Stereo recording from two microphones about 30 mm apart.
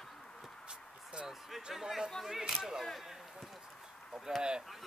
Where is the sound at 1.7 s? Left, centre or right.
Centre.